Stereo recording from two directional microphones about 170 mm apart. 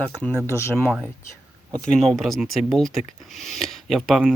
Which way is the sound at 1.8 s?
Centre (ahead or behind).